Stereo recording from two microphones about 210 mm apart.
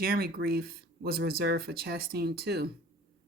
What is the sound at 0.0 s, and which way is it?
Speech, 45° right (ahead or behind).